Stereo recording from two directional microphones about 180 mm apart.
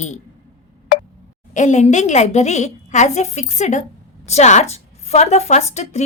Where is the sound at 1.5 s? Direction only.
40° left (ahead or behind).